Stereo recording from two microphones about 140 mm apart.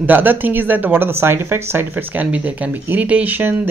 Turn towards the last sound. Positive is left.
turn(degrees=-10)  # may be behind; listen again after turning